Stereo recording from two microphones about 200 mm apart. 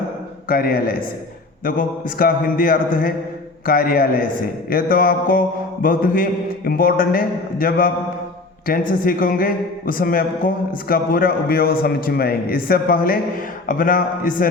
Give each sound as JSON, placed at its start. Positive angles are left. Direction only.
{"t": 0.4, "sound": "a man's voice", "side_deg": 45}